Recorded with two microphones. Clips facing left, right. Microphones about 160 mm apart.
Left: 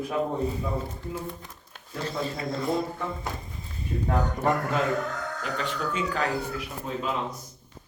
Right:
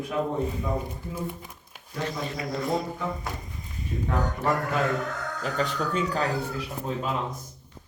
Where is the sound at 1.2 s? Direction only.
10° right (ahead or behind).